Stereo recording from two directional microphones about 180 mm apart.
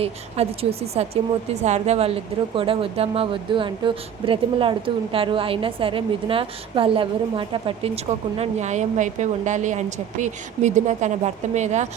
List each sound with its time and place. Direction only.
0.0 s a woman's voice: 35° right (ahead or behind)
8.4 s a woman's voice: 40° right (ahead or behind)